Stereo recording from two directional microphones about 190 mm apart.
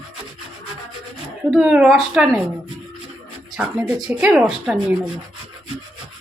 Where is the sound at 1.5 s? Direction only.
5° right (ahead or behind).